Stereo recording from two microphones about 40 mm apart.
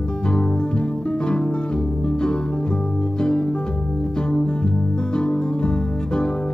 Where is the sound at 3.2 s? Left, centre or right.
Left.